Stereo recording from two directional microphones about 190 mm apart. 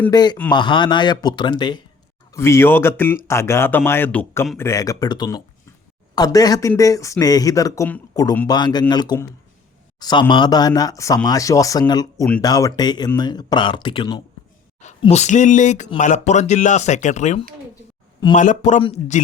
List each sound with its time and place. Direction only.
0.1 s speech: 20° left (ahead or behind)
14.8 s speech: 35° left (ahead or behind)